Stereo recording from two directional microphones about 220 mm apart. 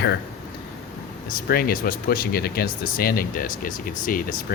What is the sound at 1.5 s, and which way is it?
Speech, 40° left (ahead or behind).